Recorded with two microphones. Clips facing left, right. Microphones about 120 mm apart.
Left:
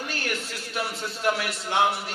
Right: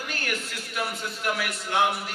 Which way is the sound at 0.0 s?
30° left (ahead or behind).